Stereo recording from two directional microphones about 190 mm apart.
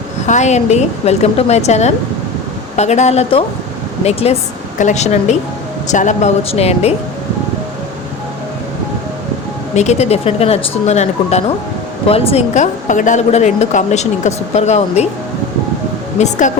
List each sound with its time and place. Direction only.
0.3 s a woman's voice: 35° left (ahead or behind)
9.7 s a woman's voice: 35° left (ahead or behind)
16.1 s a woman's voice: 35° left (ahead or behind)